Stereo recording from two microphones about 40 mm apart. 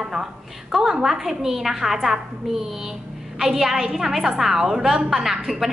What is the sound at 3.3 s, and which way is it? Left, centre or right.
A woman's voice, centre.